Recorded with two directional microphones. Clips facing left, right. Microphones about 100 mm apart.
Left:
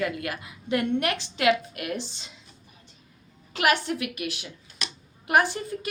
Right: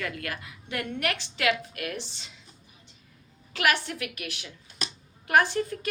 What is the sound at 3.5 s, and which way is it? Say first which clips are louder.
A woman's voice: left 3 dB; 20° left (ahead or behind).